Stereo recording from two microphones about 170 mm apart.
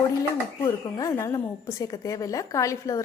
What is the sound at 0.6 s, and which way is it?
A woman's voice, 20° left (ahead or behind).